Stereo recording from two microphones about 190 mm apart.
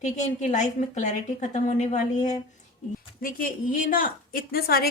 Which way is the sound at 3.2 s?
45° left (ahead or behind).